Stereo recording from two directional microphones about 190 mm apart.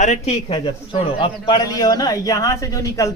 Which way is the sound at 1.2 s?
20° left (ahead or behind).